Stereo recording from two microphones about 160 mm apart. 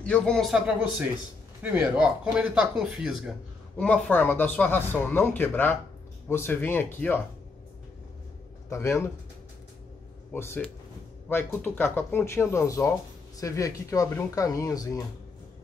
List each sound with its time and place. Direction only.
0.0 s speech: 5° left (ahead or behind)
3.7 s speech: 10° left (ahead or behind)
8.6 s speech: 15° left (ahead or behind)
10.3 s speech: 15° left (ahead or behind)